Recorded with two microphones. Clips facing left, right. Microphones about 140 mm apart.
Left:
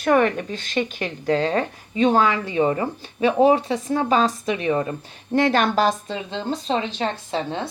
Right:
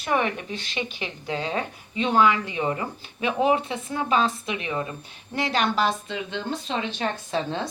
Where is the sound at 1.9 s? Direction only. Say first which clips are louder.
Left 3 dB; 35° left (ahead or behind).